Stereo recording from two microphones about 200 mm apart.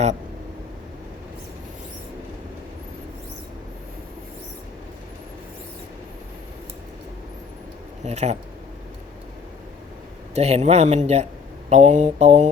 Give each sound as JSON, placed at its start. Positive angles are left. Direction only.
{"t": 8.0, "sound": "a man's voice", "side_deg": -35}
{"t": 10.3, "sound": "a man's voice", "side_deg": -35}